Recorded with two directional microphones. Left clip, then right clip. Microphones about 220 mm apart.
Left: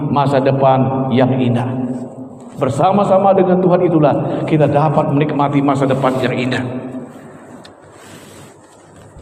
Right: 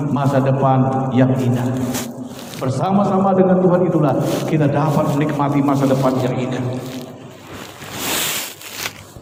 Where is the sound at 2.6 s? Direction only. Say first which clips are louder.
Left 6 dB; 40° left (ahead or behind).